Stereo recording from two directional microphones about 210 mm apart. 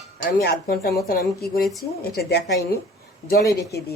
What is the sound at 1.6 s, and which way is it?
Speech, centre (ahead or behind).